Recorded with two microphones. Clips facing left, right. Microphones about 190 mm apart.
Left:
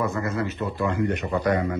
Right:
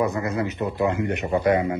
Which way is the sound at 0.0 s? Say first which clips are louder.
Right 2 dB; 20° right (ahead or behind).